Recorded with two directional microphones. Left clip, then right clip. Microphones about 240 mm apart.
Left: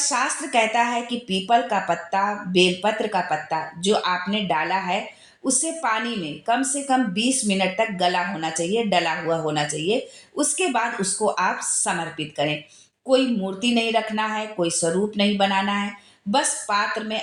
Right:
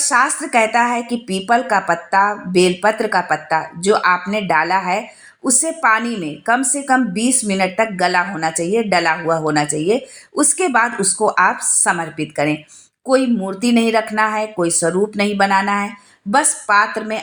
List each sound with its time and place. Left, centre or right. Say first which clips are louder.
0.1 s speech: right 10 dB; right
13.1 s speech: right 4 dB; right